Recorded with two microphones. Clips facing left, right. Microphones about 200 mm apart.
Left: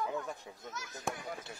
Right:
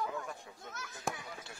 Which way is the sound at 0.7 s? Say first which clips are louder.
Left 1 dB; 55° right (ahead or behind).